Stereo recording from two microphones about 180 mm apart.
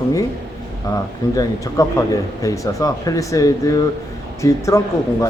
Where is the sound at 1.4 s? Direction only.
20° left (ahead or behind).